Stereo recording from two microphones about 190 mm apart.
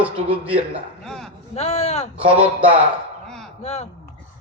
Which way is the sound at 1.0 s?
Centre (ahead or behind).